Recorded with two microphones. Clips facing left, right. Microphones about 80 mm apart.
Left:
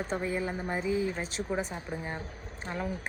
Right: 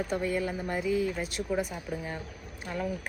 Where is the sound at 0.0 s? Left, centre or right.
Left.